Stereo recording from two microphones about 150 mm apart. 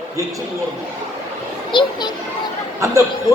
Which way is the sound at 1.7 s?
30° left (ahead or behind).